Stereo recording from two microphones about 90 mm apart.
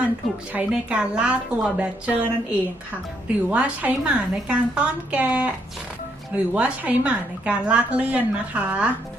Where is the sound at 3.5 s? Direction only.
15° right (ahead or behind).